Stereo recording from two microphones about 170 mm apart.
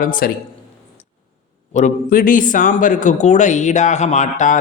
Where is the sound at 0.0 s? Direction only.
55° left (ahead or behind).